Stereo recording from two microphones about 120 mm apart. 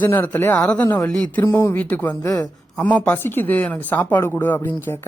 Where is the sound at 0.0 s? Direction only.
15° left (ahead or behind).